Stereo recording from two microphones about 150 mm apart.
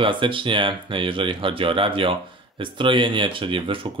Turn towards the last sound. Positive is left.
turn(degrees=-35)  # may be behind; listen again after turning